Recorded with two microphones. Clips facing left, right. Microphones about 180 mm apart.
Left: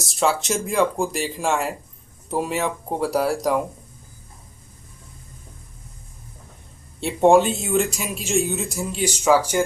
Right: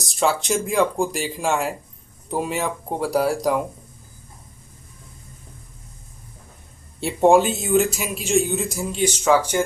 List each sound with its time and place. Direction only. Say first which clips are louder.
0.0 s speech: even; centre (ahead or behind)
7.0 s speech: even; centre (ahead or behind)